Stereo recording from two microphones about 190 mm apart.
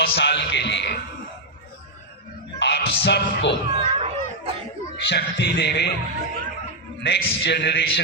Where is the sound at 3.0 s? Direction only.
65° left (ahead or behind).